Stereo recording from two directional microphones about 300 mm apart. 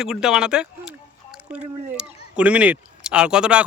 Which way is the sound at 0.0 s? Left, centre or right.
Centre.